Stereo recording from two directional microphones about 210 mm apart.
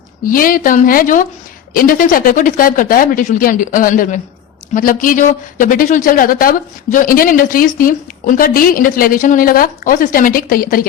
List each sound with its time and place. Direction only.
0.3 s speech: 40° left (ahead or behind)